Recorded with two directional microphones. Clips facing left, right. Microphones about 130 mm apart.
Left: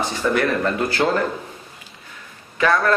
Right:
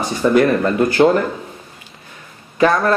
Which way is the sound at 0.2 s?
25° right (ahead or behind).